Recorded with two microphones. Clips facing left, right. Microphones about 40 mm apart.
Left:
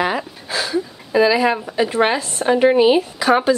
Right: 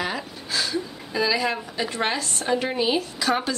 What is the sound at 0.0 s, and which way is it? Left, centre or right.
Speech, left.